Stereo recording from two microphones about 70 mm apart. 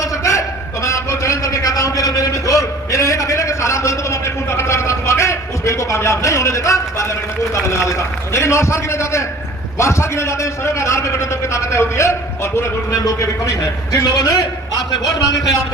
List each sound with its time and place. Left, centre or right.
0.0 s a sound: left
9.7 s a man's voice: left
13.9 s a man's voice: left